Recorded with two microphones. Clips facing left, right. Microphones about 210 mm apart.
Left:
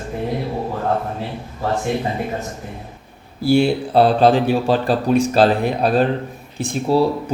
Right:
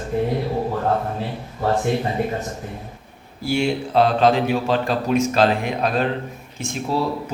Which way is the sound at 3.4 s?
35° left (ahead or behind).